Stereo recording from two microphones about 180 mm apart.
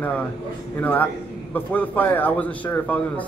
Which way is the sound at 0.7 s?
10° left (ahead or behind).